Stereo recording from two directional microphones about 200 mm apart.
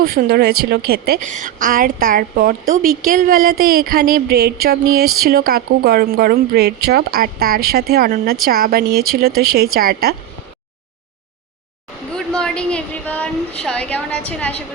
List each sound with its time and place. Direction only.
0.0 s a woman's voice: 50° right (ahead or behind)
1.3 s a woman's voice: 40° right (ahead or behind)
12.1 s a woman's voice: 5° left (ahead or behind)